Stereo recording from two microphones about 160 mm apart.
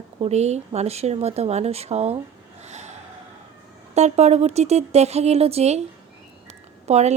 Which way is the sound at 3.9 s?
45° right (ahead or behind).